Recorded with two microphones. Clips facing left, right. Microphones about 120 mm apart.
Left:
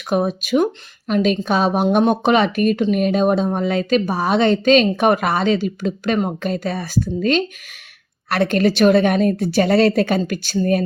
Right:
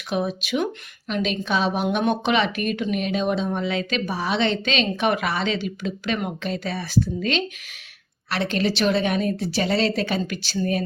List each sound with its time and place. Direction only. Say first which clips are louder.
0.1 s speech: left 6 dB; 45° left (ahead or behind)